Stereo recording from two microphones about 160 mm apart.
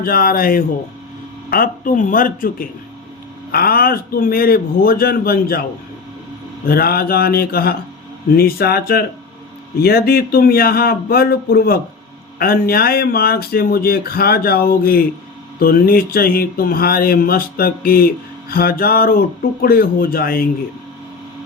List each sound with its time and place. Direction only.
0.0 s a man's voice: 65° left (ahead or behind)
6.7 s speech: 70° left (ahead or behind)